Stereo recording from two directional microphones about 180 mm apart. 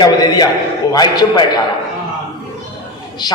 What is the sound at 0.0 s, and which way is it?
A man's voice, 25° left (ahead or behind).